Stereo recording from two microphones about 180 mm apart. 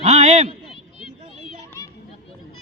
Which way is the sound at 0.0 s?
40° right (ahead or behind).